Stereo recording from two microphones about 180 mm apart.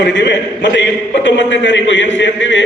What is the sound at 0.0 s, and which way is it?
A man's voice, 80° left.